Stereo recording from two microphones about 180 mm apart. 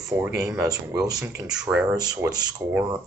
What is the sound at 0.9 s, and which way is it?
Speech, 20° right (ahead or behind).